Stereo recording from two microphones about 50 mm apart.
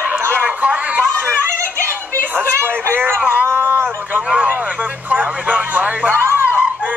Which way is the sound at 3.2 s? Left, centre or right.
Right.